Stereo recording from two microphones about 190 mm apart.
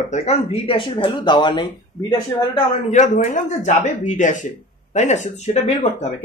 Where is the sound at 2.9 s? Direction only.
40° left (ahead or behind).